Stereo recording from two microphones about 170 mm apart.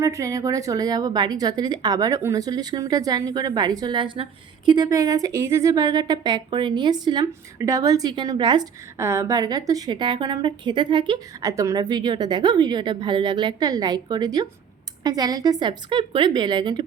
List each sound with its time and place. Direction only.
0.0 s speech: 20° right (ahead or behind)